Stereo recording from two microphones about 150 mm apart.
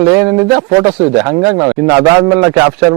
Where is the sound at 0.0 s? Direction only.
15° right (ahead or behind).